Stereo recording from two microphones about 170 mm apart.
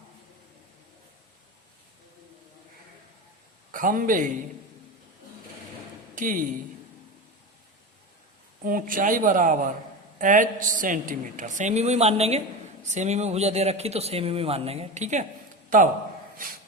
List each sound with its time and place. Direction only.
3.7 s a man's voice: 55° right (ahead or behind)
6.1 s speech: 50° right (ahead or behind)
8.6 s a woman's voice: 55° right (ahead or behind)